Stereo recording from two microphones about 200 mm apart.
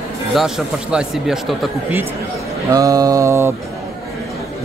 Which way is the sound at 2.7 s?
15° right (ahead or behind).